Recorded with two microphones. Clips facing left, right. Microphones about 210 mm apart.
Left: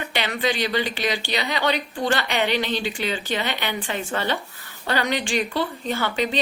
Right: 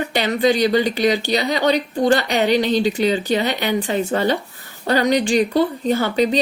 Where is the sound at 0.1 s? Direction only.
40° right (ahead or behind).